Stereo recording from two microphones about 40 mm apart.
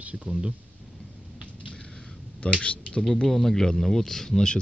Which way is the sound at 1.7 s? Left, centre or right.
Left.